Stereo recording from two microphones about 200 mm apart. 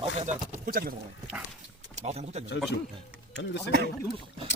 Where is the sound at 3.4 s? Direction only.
60° left (ahead or behind).